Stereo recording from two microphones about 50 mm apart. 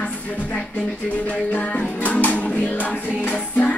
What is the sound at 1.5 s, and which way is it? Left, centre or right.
Music, left.